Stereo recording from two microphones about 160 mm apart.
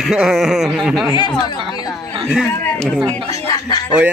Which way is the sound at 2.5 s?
15° left (ahead or behind).